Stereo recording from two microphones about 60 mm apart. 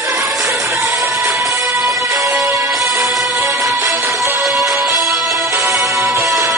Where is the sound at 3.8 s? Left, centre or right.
Right.